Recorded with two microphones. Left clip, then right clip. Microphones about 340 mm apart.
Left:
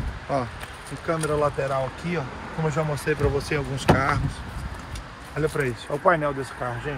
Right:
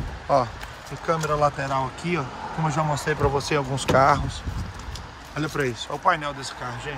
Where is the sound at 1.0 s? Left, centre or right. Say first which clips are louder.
Right 2 dB; centre.